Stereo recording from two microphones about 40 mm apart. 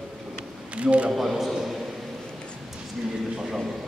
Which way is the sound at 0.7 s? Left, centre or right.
Right.